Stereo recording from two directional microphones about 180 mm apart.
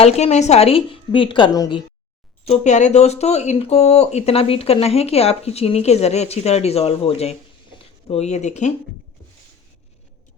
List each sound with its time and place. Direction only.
0.0 s speech: 40° left (ahead or behind)
2.4 s speech: 40° left (ahead or behind)